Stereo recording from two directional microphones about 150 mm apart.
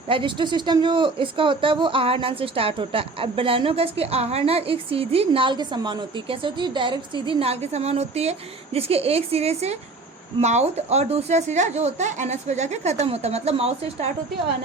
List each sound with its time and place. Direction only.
0.1 s speech: 35° right (ahead or behind)